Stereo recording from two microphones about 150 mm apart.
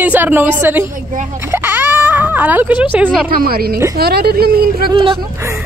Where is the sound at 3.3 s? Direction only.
85° right.